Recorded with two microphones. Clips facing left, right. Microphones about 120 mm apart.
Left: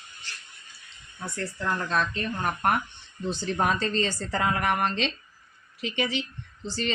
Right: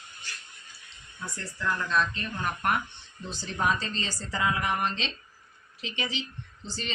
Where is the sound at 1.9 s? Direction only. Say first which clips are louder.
Left 1 dB; 45° left (ahead or behind).